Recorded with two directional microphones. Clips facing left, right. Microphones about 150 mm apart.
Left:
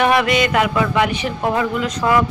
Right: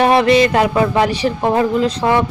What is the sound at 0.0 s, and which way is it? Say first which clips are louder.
Mantra: right 4 dB; 30° right (ahead or behind).